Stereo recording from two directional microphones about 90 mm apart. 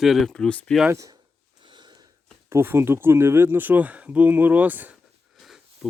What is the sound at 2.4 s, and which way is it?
Speech, 25° right (ahead or behind).